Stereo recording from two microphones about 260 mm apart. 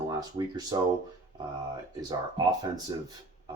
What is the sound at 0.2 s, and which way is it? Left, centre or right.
Speech, centre.